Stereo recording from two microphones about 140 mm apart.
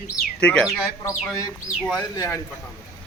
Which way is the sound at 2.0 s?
25° left (ahead or behind).